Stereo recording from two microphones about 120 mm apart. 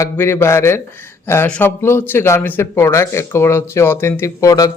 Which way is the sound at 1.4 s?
10° left (ahead or behind).